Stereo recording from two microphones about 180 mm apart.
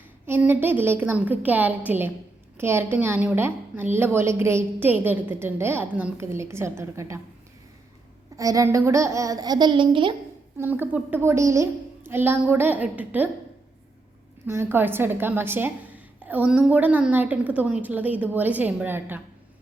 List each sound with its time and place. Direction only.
0.3 s a woman's voice: 10° right (ahead or behind)
8.4 s a child's voice: 20° right (ahead or behind)
10.6 s a woman's voice: 10° right (ahead or behind)
14.4 s a woman's voice: 15° right (ahead or behind)